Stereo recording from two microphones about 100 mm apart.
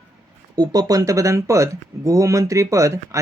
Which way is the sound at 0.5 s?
40° right (ahead or behind).